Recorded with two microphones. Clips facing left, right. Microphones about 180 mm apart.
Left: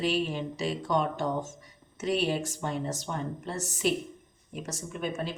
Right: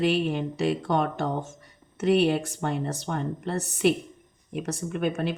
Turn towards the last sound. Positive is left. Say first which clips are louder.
# right 6 dB
turn(degrees=-60)  # may be behind; listen again after turning